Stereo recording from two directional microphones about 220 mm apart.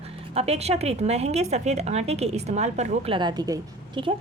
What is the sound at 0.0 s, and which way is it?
A woman's voice, 25° right (ahead or behind).